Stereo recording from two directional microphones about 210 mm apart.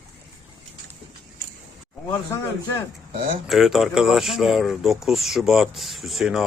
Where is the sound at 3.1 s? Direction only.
40° right (ahead or behind).